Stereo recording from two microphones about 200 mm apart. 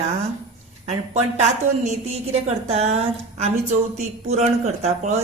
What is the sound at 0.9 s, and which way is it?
A woman's voice, 35° right (ahead or behind).